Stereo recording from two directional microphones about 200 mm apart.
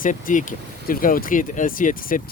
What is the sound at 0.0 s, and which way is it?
Speech, 40° left (ahead or behind).